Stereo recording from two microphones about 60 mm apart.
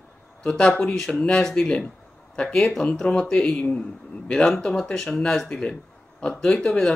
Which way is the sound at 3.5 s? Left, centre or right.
Left.